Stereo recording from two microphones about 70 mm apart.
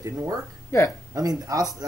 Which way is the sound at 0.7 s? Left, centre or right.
Left.